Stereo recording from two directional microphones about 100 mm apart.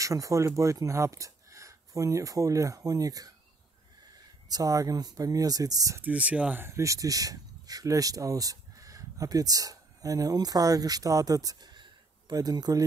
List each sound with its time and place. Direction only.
0.0 s speech: 35° right (ahead or behind)
4.5 s speech: 35° right (ahead or behind)
5.9 s speech: 15° right (ahead or behind)
6.6 s speech: 30° right (ahead or behind)